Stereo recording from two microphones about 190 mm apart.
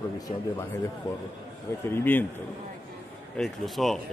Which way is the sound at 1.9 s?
10° left (ahead or behind).